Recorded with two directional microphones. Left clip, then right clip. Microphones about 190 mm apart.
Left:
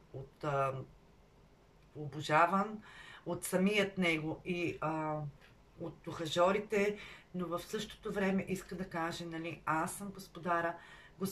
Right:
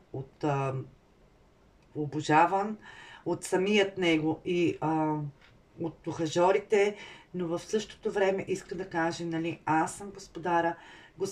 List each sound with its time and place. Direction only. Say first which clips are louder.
0.4 s speech: right 4 dB; 30° right (ahead or behind)
2.0 s speech: right 6 dB; 30° right (ahead or behind)